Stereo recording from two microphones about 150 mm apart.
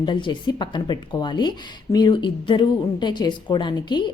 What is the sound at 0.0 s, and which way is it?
Speech, 30° left (ahead or behind).